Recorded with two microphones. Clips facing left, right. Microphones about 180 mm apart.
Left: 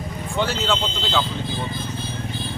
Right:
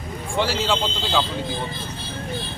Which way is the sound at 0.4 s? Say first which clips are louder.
Even; 10° right (ahead or behind).